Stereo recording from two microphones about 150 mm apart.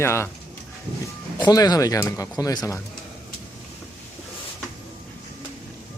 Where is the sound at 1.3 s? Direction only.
25° left (ahead or behind).